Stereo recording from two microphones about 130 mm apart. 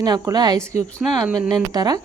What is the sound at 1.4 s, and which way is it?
Speech, 30° right (ahead or behind).